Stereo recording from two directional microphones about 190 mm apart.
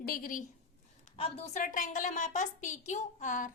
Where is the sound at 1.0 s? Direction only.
30° left (ahead or behind).